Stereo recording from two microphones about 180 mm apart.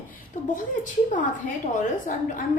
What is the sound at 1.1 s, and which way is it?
A woman's voice, 45° left (ahead or behind).